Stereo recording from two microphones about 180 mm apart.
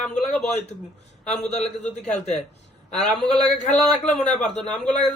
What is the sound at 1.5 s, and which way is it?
Speech, 35° left (ahead or behind).